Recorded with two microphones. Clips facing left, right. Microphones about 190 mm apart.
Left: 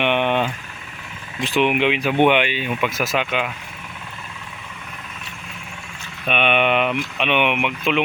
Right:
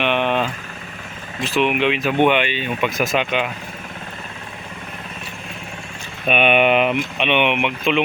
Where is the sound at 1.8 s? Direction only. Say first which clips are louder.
Right 1 dB; 15° left (ahead or behind).